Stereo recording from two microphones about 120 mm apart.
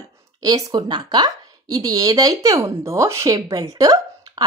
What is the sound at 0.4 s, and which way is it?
A woman's voice, 35° right (ahead or behind).